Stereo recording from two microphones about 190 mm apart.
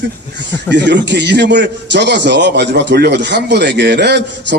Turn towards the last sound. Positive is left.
turn(degrees=-60)  # may be behind; listen again after turning